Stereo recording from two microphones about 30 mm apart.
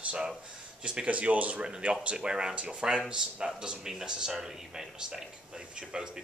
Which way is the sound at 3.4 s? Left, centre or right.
Right.